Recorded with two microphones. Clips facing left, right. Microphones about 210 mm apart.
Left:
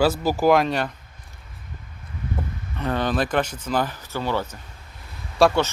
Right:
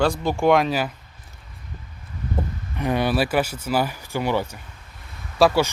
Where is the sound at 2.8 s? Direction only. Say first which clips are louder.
Right 2 dB; 10° right (ahead or behind).